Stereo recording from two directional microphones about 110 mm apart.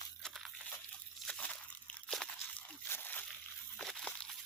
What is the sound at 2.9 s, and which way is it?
Slosh, 15° left (ahead or behind).